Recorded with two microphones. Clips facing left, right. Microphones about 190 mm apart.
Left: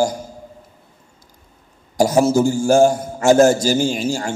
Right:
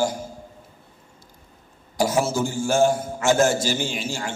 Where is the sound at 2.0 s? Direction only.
40° left (ahead or behind).